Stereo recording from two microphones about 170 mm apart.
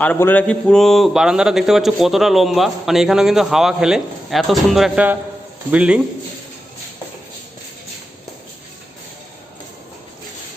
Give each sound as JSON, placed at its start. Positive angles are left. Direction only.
{"t": 0.0, "sound": "a man's voice", "side_deg": 10}